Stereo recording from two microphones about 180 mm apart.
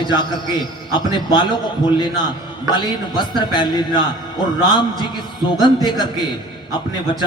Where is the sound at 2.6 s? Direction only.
25° left (ahead or behind).